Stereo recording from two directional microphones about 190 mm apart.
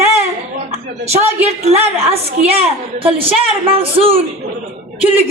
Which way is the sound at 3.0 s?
30° right (ahead or behind).